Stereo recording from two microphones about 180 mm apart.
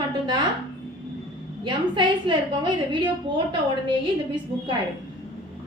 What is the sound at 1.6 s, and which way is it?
A woman's voice, 25° right (ahead or behind).